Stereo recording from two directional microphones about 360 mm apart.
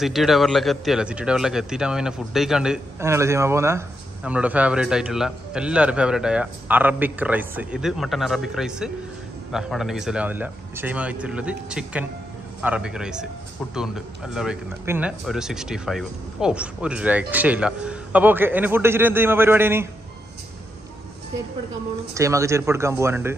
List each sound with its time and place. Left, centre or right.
0.0 s speech: centre
22.1 s speech: centre